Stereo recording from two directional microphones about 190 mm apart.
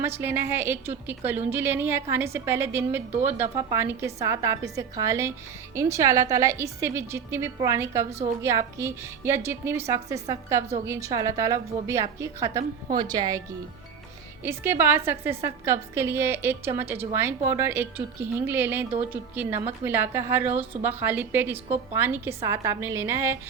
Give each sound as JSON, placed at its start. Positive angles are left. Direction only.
{"t": 0.0, "sound": "a woman's voice", "side_deg": -10}
{"t": 14.4, "sound": "a woman's voice", "side_deg": -10}